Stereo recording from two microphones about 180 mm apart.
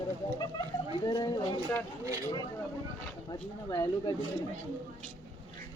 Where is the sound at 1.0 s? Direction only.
20° left (ahead or behind).